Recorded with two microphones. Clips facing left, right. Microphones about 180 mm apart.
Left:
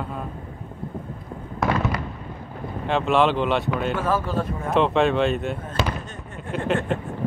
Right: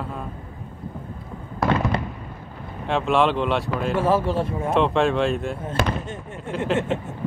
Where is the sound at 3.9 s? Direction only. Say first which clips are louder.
Right 3 dB; 25° right (ahead or behind).